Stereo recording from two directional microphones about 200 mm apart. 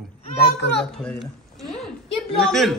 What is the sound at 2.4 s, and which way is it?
Speech, centre (ahead or behind).